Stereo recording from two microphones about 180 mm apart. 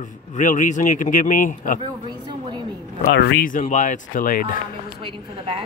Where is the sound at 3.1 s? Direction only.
65° left (ahead or behind).